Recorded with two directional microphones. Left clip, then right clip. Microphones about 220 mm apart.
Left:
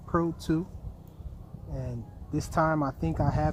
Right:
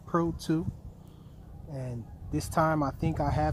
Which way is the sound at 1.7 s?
10° right (ahead or behind).